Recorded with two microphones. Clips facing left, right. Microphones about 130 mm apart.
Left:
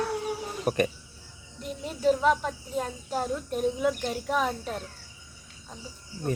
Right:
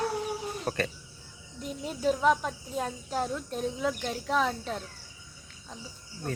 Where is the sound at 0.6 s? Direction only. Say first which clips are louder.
Left 7 dB; 15° left (ahead or behind).